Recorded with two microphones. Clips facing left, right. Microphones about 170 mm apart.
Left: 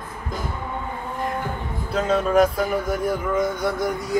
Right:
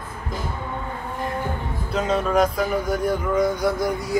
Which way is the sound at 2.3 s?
5° left (ahead or behind).